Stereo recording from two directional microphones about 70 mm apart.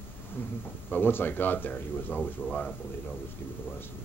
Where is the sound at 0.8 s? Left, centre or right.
Left.